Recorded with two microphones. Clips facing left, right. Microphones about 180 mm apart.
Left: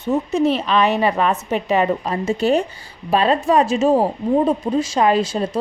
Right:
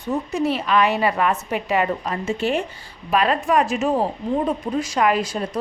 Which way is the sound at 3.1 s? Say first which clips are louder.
Left 3 dB; 30° left (ahead or behind).